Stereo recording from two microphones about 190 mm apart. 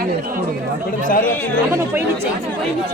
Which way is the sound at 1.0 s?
50° left (ahead or behind).